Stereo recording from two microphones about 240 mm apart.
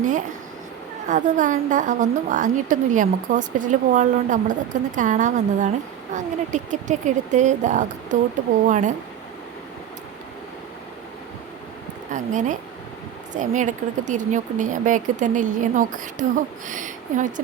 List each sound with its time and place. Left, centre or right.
1.0 s a woman's voice: right
12.1 s a woman's voice: right